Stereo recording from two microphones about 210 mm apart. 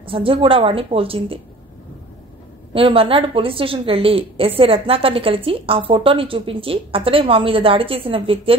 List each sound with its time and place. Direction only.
0.0 s a woman's voice: 25° right (ahead or behind)
2.7 s a woman's voice: 25° right (ahead or behind)